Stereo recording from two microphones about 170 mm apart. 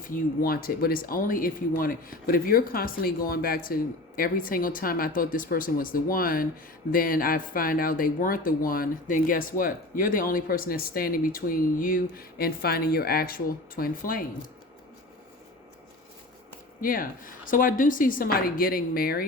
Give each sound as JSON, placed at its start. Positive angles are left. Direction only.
{"t": 0.0, "sound": "speech", "side_deg": 55}
{"t": 16.8, "sound": "speech", "side_deg": 55}